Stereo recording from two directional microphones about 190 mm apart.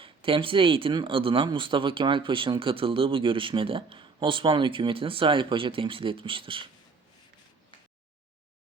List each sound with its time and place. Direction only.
0.0 s speech: 30° right (ahead or behind)